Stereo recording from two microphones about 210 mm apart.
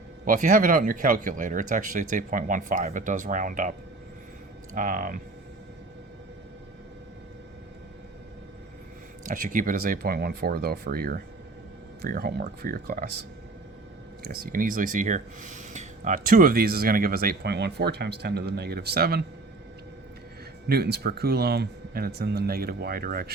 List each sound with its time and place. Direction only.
0.3 s speech: 40° right (ahead or behind)
9.2 s speech: 40° right (ahead or behind)
20.7 s speech: 50° right (ahead or behind)